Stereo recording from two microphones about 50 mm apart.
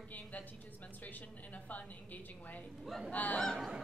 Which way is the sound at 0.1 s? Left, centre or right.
Left.